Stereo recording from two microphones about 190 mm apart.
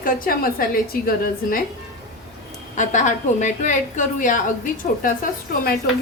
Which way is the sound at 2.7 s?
40° left (ahead or behind).